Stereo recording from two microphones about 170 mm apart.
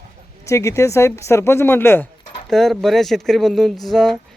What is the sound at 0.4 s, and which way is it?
Speech, 15° left (ahead or behind).